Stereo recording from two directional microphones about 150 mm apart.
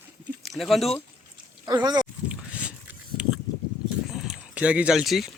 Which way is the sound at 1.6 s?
25° right (ahead or behind).